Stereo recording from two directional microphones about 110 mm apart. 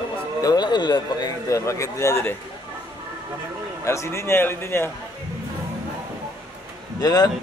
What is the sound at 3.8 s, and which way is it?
A man's voice, 25° left (ahead or behind).